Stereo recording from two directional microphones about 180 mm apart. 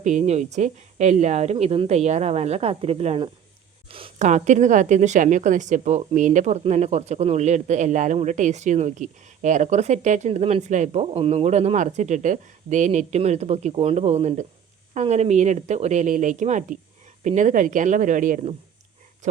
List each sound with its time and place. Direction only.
0.0 s a woman's voice: 40° right (ahead or behind)